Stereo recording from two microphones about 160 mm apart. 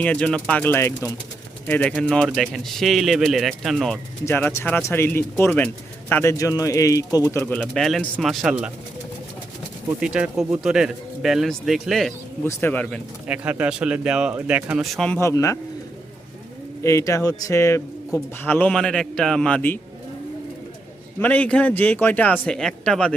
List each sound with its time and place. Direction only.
0.0 s speech: 5° left (ahead or behind)
4.3 s speech: 15° left (ahead or behind)
6.3 s speech: 20° left (ahead or behind); by 8.7 s 5° right (ahead or behind)
10.0 s speech: 5° right (ahead or behind)
12.5 s speech: 15° left (ahead or behind)
13.2 s speech: 10° right (ahead or behind)
14.9 s speech: 5° left (ahead or behind)
15.2 s speech: 20° left (ahead or behind)
16.8 s speech: 20° left (ahead or behind)
21.2 s speech: 10° left (ahead or behind)